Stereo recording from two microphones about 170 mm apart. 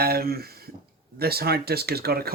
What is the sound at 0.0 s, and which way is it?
Speech, 65° right (ahead or behind).